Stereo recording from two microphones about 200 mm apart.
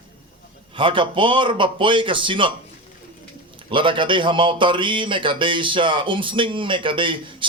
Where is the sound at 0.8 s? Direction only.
25° right (ahead or behind).